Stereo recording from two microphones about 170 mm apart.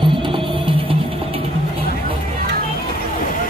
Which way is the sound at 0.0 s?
30° right (ahead or behind).